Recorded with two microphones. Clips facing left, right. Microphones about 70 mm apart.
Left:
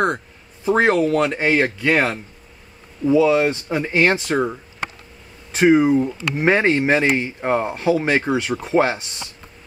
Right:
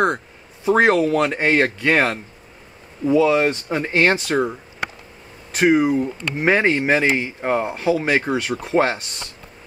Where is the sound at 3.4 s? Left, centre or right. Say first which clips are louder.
Even; centre.